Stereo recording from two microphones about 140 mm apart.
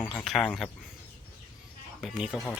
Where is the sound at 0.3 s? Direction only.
Centre (ahead or behind).